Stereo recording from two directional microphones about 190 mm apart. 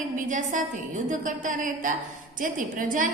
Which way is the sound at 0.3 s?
45° right (ahead or behind).